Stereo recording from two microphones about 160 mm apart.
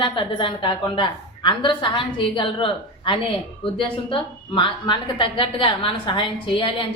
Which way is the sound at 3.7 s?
30° left (ahead or behind).